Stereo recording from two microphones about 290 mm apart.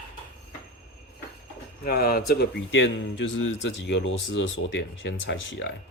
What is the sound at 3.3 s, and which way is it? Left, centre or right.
Speech, left.